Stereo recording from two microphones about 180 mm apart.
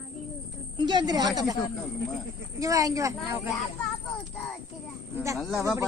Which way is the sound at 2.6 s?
20° right (ahead or behind).